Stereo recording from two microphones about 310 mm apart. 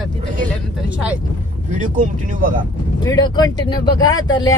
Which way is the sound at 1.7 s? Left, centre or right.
Right.